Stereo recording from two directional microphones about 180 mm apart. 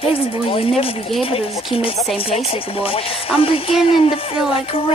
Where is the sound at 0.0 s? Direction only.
30° left (ahead or behind).